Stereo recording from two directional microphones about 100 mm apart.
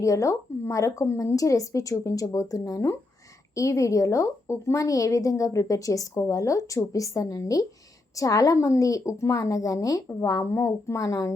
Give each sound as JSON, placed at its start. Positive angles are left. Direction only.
{"t": 0.0, "sound": "a woman's voice", "side_deg": 35}